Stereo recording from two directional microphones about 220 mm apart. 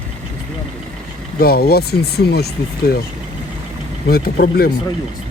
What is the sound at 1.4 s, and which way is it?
Speech, 45° left (ahead or behind).